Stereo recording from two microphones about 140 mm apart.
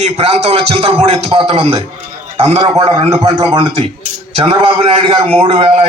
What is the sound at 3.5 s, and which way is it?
A man's voice, 40° right (ahead or behind).